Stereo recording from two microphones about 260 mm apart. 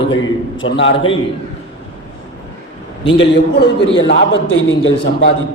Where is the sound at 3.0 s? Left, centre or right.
Left.